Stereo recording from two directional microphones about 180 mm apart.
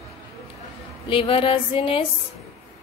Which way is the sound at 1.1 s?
30° left (ahead or behind).